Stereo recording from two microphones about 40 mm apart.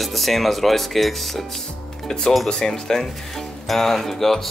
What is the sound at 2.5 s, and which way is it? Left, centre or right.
Speech, centre.